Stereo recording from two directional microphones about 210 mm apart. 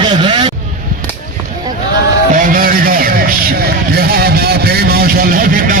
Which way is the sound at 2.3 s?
40° right (ahead or behind).